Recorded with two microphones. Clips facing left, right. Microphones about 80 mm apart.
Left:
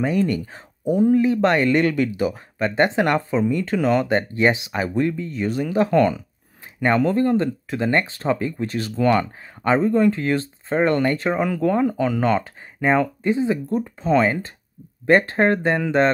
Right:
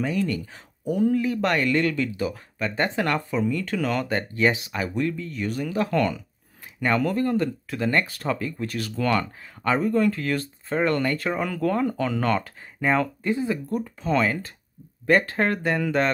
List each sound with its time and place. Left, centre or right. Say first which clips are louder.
0.0 s speech: left 5 dB; left